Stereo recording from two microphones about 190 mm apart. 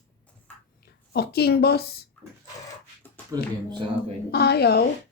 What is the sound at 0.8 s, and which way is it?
A woman's voice, 60° left (ahead or behind).